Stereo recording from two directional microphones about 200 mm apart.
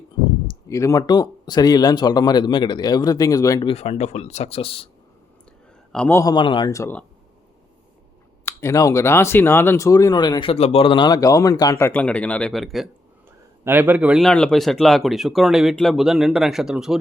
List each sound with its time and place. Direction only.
0.4 s speech: 15° left (ahead or behind)
3.7 s speech: 30° left (ahead or behind)
5.9 s speech: 10° left (ahead or behind)
8.4 s speech: 15° left (ahead or behind); by 17.0 s centre (ahead or behind)